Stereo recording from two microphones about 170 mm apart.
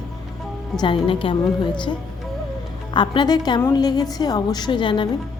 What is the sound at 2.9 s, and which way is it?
A woman's voice, 25° left (ahead or behind).